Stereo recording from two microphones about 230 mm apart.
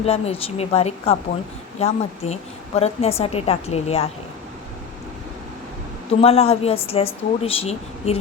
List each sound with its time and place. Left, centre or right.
0.0 s speech: left
6.1 s speech: left